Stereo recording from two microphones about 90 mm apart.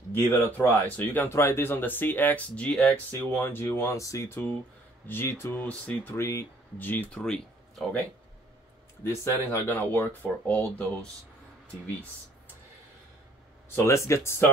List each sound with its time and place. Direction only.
0.1 s speech: 25° left (ahead or behind)
3.1 s speech: 25° left (ahead or behind)
4.3 s speech: 20° left (ahead or behind)
6.1 s speech: 30° left (ahead or behind); by 8.0 s 10° left (ahead or behind)
9.0 s speech: 30° left (ahead or behind)
13.8 s speech: 35° left (ahead or behind)